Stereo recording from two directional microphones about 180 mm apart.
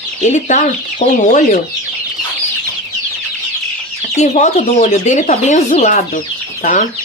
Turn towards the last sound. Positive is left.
turn(degrees=45)  # may be behind; listen again after turning